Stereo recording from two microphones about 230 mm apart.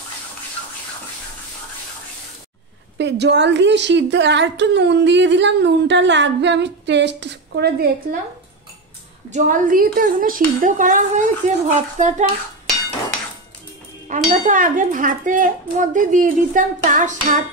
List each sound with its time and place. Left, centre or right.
3.0 s speech: right
9.3 s speech: right
14.0 s speech: right